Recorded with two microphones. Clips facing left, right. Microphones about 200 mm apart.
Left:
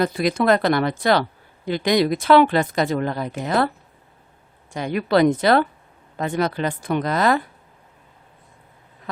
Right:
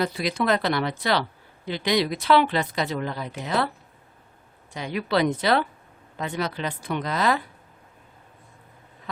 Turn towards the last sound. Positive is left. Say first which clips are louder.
# left 5 dB
turn(degrees=50)  # may be behind; listen again after turning